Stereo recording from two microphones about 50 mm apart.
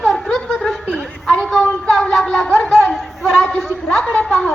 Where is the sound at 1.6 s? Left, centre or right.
Centre.